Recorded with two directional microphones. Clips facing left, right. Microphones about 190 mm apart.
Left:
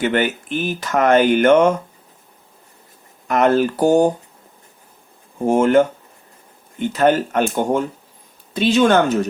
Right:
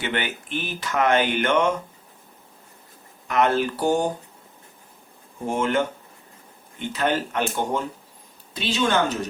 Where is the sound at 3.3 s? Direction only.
45° left (ahead or behind).